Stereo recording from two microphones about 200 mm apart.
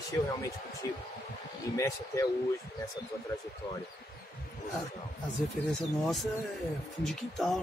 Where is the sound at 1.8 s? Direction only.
15° left (ahead or behind).